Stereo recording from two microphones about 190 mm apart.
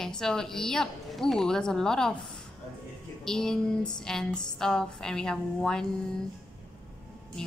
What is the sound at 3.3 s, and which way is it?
A woman's voice, 5° left (ahead or behind).